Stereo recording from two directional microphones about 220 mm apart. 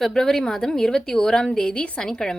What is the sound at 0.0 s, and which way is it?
A woman's voice, centre (ahead or behind).